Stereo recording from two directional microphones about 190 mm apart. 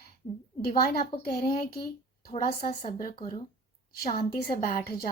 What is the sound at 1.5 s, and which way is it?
Speech, 55° left (ahead or behind).